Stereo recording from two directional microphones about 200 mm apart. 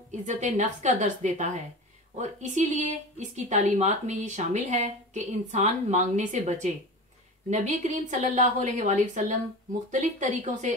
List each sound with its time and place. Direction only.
0.1 s speech: 35° right (ahead or behind)